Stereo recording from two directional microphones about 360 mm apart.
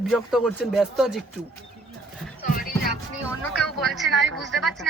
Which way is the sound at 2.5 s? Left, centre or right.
Left.